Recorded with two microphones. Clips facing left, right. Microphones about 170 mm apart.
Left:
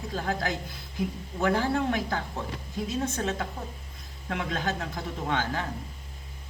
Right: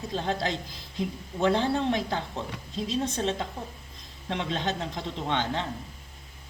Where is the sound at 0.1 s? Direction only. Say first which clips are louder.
Right 1 dB; 25° right (ahead or behind).